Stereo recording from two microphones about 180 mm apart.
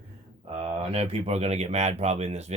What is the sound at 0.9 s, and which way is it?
Speech, 35° right (ahead or behind).